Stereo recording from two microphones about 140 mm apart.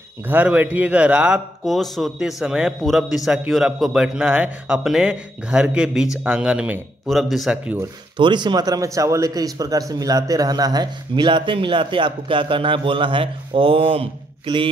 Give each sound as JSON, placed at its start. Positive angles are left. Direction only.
{"t": 0.3, "sound": "speech", "side_deg": -10}
{"t": 8.2, "sound": "a man's voice", "side_deg": -35}